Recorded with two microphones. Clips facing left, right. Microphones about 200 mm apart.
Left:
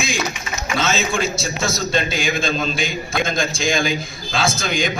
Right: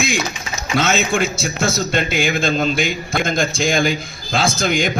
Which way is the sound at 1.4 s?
55° right (ahead or behind).